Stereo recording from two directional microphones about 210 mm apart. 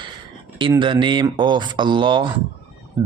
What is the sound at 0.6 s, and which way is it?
Speech, 25° right (ahead or behind).